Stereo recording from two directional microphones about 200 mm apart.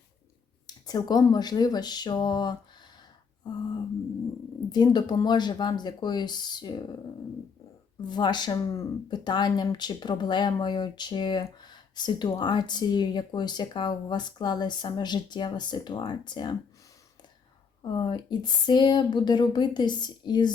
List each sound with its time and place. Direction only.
0.7 s speech: 20° left (ahead or behind)
4.7 s speech: 20° left (ahead or behind)
8.0 s speech: 20° left (ahead or behind)
17.8 s speech: 20° left (ahead or behind)